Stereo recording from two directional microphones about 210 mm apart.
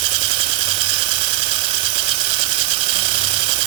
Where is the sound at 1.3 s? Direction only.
25° right (ahead or behind).